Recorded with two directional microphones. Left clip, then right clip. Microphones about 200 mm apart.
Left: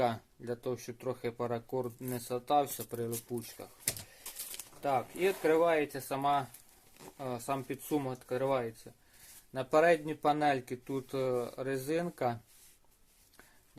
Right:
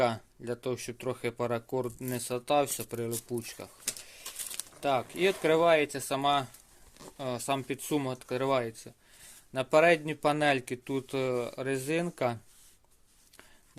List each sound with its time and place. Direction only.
0.0 s speech: 25° right (ahead or behind)
4.8 s speech: 45° right (ahead or behind)
9.5 s speech: 35° right (ahead or behind)